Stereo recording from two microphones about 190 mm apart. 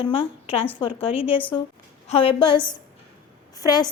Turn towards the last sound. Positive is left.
turn(degrees=20)  # may be behind; listen again after turning